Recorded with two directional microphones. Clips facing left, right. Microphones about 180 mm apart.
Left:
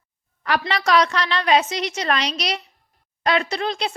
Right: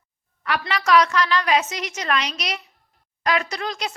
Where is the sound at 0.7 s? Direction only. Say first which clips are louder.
Right 2 dB; 35° left (ahead or behind).